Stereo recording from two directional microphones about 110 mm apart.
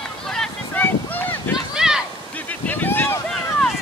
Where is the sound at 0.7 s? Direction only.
15° left (ahead or behind).